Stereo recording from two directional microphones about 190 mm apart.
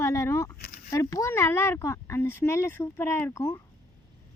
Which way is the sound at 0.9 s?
15° left (ahead or behind).